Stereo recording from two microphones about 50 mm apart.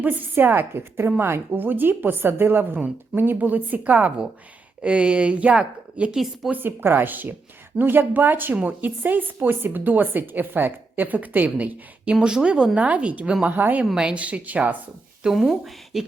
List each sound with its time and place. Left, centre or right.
0.0 s a woman's voice: right
4.8 s a woman's voice: right
6.5 s a woman's voice: right
13.6 s speech: right
13.9 s a woman's voice: right
15.2 s speech: centre